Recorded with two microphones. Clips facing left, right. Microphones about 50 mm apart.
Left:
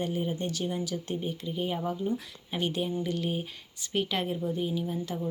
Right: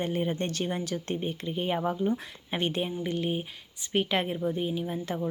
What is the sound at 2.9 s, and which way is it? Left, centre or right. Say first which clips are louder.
Speech: right 1 dB; right.